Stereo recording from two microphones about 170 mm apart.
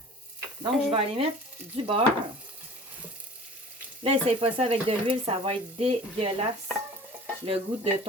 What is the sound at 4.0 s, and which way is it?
Speech, 35° right (ahead or behind).